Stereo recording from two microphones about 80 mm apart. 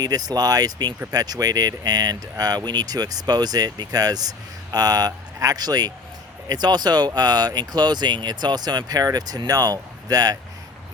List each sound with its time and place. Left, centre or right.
0.0 s speech: right